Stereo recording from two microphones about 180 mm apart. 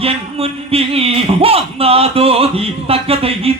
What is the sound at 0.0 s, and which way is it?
Speech, 35° right (ahead or behind).